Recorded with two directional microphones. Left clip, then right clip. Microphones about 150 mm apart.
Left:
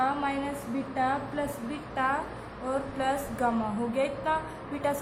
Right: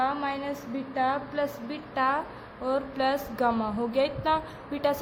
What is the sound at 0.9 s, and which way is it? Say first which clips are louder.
A woman's voice: right 2 dB; 75° right (ahead or behind).